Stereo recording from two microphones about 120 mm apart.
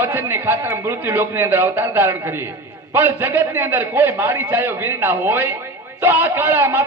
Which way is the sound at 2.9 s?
15° right (ahead or behind).